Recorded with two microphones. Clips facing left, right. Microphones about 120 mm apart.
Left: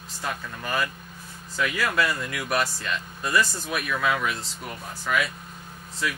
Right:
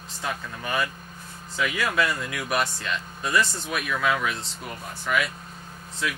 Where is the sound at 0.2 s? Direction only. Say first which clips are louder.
Even; centre (ahead or behind).